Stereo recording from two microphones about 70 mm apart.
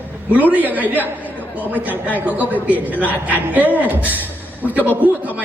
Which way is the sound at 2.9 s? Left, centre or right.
Left.